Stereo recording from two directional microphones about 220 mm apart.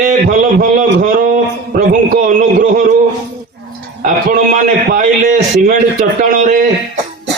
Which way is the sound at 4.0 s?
35° right (ahead or behind).